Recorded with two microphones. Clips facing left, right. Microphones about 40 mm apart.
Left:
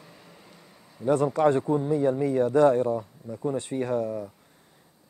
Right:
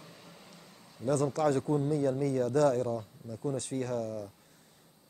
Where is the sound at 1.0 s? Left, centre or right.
Left.